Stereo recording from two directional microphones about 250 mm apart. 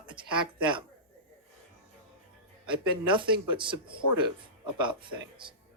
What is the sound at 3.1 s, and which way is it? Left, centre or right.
Speech, centre.